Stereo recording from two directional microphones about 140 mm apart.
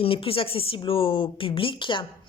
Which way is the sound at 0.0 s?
40° left (ahead or behind).